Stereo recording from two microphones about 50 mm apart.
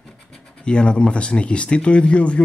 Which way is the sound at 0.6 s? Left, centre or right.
Centre.